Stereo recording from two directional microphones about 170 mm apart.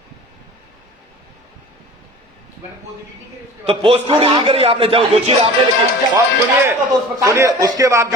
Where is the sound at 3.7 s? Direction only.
30° right (ahead or behind).